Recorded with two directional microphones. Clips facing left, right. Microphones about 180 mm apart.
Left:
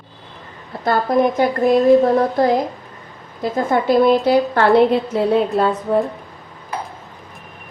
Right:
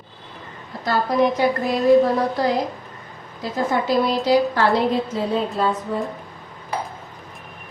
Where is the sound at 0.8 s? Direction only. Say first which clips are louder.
Left 3 dB; 55° left (ahead or behind).